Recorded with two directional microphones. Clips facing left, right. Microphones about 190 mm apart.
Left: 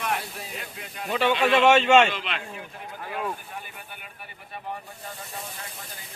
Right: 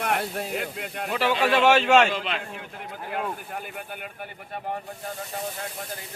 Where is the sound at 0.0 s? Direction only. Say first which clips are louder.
Right 4 dB; 60° right (ahead or behind).